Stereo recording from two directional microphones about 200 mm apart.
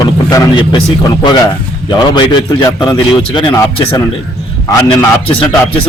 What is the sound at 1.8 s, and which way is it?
A man's voice, 20° left (ahead or behind).